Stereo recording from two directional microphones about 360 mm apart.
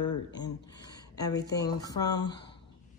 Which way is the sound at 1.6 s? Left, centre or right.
Centre.